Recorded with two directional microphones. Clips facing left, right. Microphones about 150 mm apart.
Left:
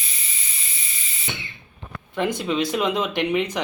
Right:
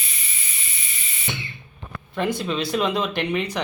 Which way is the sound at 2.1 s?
20° left (ahead or behind).